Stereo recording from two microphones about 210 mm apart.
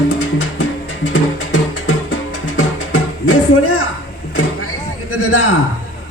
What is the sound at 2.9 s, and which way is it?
Music, 90° left.